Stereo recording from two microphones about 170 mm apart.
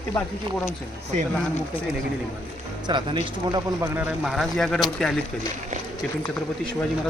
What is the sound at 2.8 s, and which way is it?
Speech, 25° right (ahead or behind).